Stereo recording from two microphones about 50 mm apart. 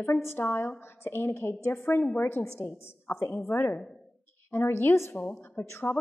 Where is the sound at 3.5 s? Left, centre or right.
Left.